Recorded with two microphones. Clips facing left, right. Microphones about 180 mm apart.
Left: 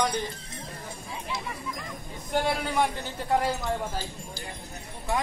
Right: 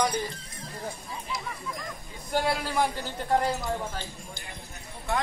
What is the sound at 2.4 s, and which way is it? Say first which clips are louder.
A man's voice: even; centre (ahead or behind).